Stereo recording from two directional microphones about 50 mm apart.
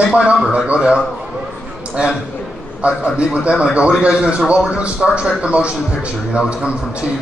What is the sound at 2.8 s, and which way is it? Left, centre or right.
A man's voice, right.